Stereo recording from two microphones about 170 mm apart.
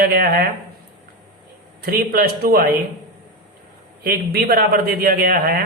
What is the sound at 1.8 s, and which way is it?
Speech, 60° right (ahead or behind).